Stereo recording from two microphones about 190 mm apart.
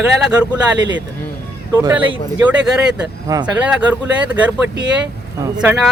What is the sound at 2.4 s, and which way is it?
A man's voice, 5° right (ahead or behind).